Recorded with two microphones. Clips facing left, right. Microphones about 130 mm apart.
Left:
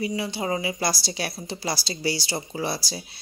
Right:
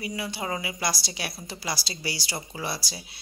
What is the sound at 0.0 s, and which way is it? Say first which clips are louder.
Speech: left 5 dB; 30° left (ahead or behind).